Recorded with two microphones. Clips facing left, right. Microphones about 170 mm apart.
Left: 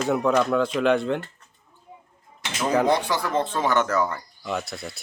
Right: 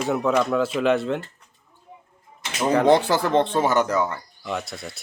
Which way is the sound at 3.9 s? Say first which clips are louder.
Right 1 dB; 5° right (ahead or behind).